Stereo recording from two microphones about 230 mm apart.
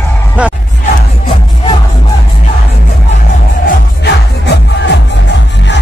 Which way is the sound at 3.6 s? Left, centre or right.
Left.